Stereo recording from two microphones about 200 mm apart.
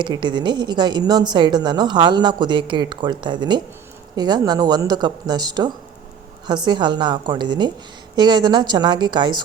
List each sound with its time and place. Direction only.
0.0 s a woman's voice: 25° right (ahead or behind)